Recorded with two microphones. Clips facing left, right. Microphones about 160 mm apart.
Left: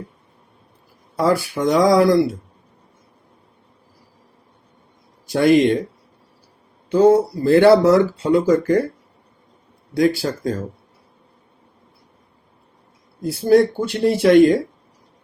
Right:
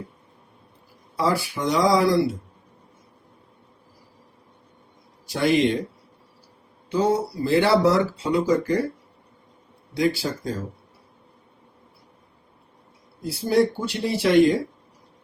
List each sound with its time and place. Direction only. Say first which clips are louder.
1.5 s speech: left 5 dB; 50° left (ahead or behind)
5.2 s a man's voice: left 6 dB; 50° left (ahead or behind)
6.9 s speech: left 8 dB; 50° left (ahead or behind)
9.9 s speech: left 5 dB; 50° left (ahead or behind)
13.2 s speech: left 6 dB; 50° left (ahead or behind)